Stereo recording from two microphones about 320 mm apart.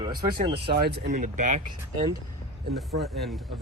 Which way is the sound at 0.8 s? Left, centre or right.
Right.